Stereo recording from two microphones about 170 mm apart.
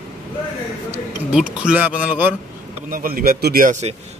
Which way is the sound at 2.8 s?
55° right (ahead or behind).